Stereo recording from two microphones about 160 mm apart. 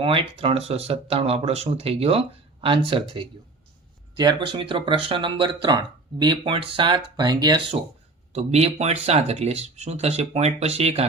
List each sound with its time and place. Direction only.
0.0 s speech: 35° right (ahead or behind)
8.3 s speech: 45° right (ahead or behind)